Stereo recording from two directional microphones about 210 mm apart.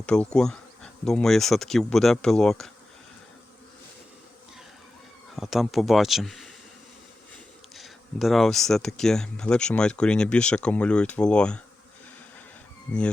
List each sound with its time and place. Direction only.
0.0 s speech: 5° left (ahead or behind)
5.4 s speech: centre (ahead or behind)
7.8 s speech: centre (ahead or behind)